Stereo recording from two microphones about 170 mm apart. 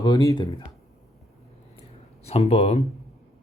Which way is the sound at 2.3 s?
35° left (ahead or behind).